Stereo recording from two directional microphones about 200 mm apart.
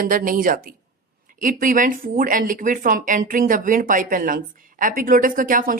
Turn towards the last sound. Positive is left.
turn(degrees=-45)  # may be behind; listen again after turning